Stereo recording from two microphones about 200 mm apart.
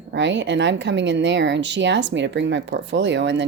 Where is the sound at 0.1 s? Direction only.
60° right (ahead or behind).